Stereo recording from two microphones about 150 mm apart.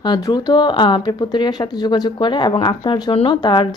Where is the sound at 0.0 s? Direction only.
30° left (ahead or behind).